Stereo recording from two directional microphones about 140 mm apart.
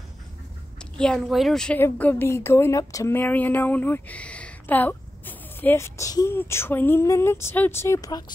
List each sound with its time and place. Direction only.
0.7 s a woman's voice: 5° left (ahead or behind); by 8.3 s 25° left (ahead or behind)